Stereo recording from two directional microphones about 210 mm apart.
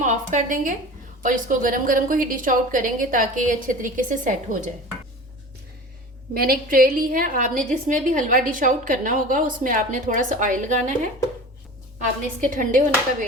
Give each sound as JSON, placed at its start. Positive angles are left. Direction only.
{"t": 0.0, "sound": "a woman's voice", "side_deg": -35}
{"t": 6.3, "sound": "a woman's voice", "side_deg": -45}
{"t": 12.5, "sound": "a woman's voice", "side_deg": -40}